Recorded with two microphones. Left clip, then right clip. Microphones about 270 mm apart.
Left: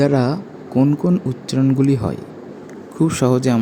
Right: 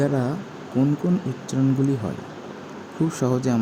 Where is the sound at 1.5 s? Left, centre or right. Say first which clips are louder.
Left 5 dB; left.